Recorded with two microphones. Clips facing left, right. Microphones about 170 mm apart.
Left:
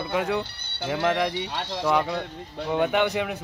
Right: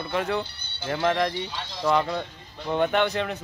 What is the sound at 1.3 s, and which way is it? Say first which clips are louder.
Speech: left 3 dB; 70° left (ahead or behind).